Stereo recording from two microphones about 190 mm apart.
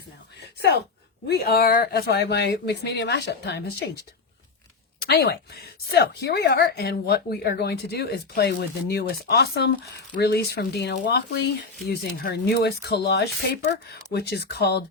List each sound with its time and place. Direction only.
1.3 s a woman's voice: 55° left (ahead or behind)
4.9 s a woman's voice: 55° left (ahead or behind)